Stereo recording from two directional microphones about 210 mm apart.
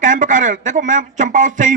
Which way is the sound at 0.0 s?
35° right (ahead or behind).